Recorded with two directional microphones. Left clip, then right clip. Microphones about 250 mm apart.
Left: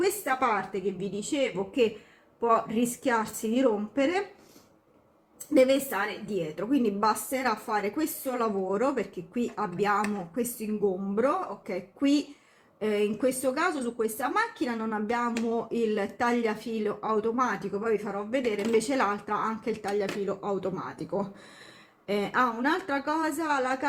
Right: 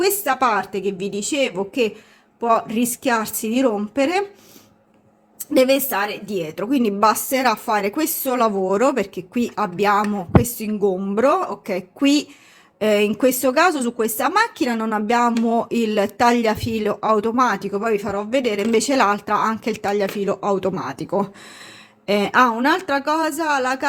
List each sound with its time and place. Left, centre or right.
0.0 s a woman's voice: right
5.5 s a woman's voice: right
13.1 s a woman's voice: right